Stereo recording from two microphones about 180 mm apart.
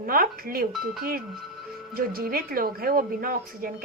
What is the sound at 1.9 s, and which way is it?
A woman's voice, 55° right (ahead or behind).